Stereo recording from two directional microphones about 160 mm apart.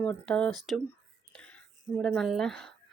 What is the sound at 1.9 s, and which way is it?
Speech, 5° left (ahead or behind).